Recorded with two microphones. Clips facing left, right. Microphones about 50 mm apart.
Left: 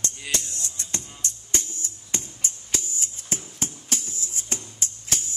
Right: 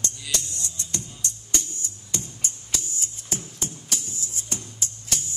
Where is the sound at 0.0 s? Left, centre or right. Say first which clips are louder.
Left 1 dB; left.